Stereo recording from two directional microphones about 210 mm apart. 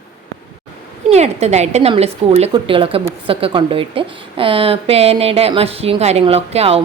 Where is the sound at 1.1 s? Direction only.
30° right (ahead or behind).